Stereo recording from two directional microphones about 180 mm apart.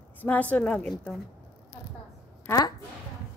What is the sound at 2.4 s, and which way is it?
Speech, 20° left (ahead or behind).